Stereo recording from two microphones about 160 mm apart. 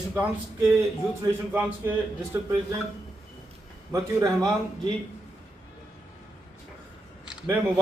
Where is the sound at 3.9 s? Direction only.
20° right (ahead or behind).